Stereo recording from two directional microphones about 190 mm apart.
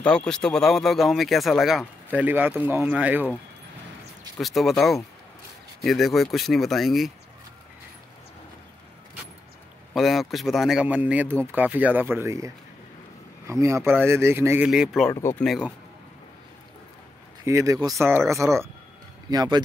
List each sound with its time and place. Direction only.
0.0 s speech: 5° left (ahead or behind)
4.4 s speech: centre (ahead or behind)
9.9 s speech: centre (ahead or behind)
17.5 s speech: 15° right (ahead or behind)